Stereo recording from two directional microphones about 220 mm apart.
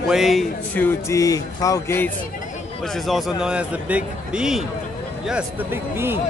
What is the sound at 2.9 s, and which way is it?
A man's voice, centre (ahead or behind).